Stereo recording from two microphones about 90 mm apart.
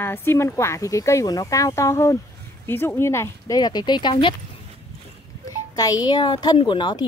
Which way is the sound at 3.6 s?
50° left (ahead or behind).